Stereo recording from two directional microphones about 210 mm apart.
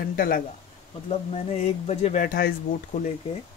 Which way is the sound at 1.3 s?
30° left (ahead or behind).